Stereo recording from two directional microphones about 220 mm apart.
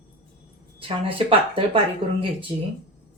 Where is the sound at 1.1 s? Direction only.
25° right (ahead or behind).